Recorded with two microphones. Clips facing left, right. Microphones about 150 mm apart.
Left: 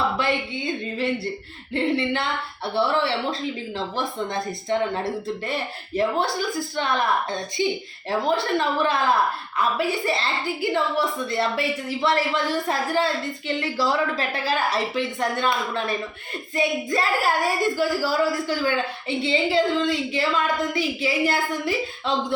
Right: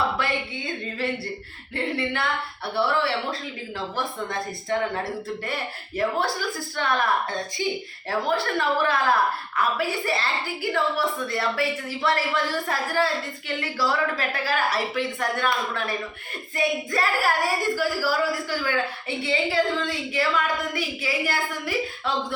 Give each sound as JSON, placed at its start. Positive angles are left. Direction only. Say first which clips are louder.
{"t": 0.2, "sound": "speech", "louder": "left 3 dB", "side_deg": 20}
{"t": 6.7, "sound": "speech", "louder": "even", "side_deg": 20}